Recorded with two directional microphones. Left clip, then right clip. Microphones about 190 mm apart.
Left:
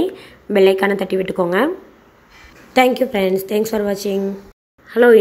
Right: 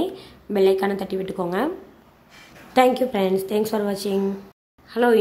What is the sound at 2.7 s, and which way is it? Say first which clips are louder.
A woman's voice: left 3 dB; 15° left (ahead or behind).